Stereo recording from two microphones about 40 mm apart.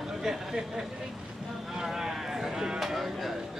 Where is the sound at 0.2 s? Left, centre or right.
Centre.